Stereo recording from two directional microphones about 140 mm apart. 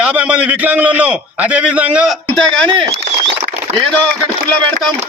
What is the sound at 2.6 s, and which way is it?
Speech, 35° right (ahead or behind).